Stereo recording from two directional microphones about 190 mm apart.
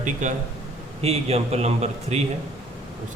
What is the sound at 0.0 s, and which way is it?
A man's voice, 40° right (ahead or behind).